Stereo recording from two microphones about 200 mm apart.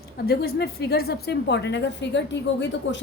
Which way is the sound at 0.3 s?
55° left (ahead or behind).